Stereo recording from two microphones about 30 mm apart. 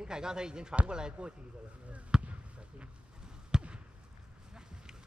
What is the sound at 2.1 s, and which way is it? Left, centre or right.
Basketball bounce, centre.